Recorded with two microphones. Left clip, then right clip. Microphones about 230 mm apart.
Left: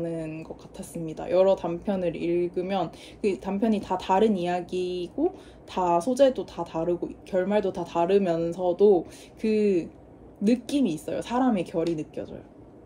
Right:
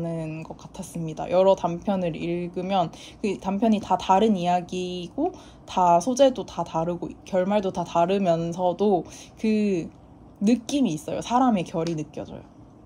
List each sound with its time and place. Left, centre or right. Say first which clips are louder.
0.0 s speech: even; right